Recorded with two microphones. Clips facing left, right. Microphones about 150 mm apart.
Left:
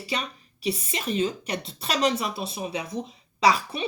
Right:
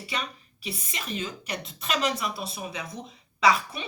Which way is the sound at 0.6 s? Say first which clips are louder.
Left 8 dB; 30° left (ahead or behind).